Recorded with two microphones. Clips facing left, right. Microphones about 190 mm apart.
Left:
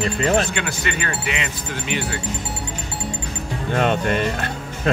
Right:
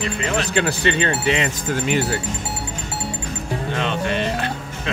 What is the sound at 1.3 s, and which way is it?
Speech, 40° right (ahead or behind).